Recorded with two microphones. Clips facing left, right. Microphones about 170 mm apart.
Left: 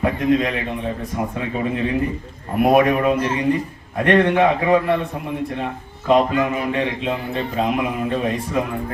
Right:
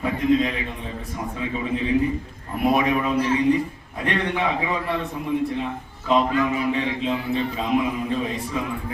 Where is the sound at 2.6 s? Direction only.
55° left (ahead or behind).